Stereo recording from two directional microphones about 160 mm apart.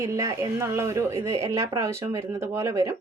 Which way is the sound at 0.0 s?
20° right (ahead or behind).